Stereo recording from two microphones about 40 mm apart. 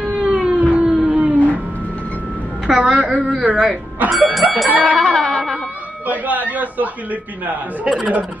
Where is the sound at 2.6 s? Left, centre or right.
Right.